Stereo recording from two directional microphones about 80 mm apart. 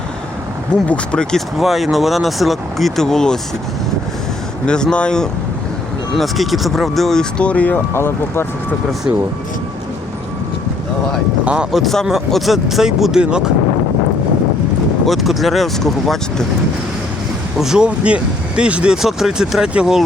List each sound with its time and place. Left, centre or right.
0.9 s speech: centre
1.5 s speech: centre
4.6 s speech: centre
7.9 s speech: left
11.4 s speech: centre
11.8 s speech: centre
15.0 s speech: centre
17.6 s speech: centre